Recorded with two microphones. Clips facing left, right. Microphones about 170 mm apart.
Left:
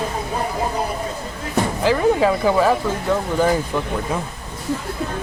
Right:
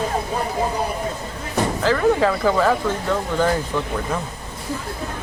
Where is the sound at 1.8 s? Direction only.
15° left (ahead or behind).